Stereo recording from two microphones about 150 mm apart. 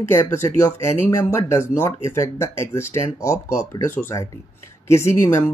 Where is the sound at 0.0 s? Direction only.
15° left (ahead or behind).